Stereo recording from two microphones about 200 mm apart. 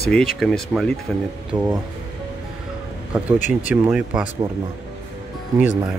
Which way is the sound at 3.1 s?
10° right (ahead or behind).